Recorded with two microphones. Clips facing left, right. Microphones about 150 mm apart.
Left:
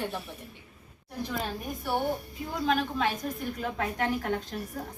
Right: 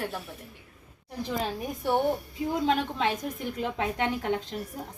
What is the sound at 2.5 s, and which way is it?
A woman's voice, 25° right (ahead or behind).